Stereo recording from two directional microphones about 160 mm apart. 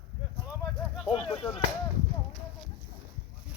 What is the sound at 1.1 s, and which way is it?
Speech, 30° left (ahead or behind).